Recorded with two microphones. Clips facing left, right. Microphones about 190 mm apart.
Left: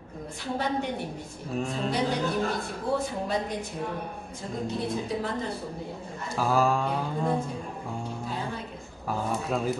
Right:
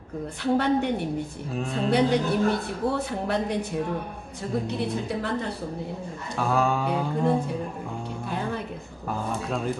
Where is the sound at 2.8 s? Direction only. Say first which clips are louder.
Right 2 dB; 60° right (ahead or behind).